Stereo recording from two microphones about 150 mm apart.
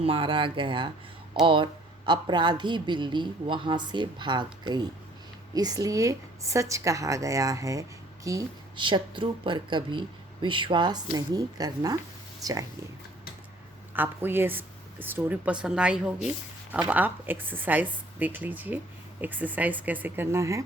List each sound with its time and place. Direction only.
0.0 s a woman's voice: 35° right (ahead or behind)
13.9 s speech: 15° right (ahead or behind)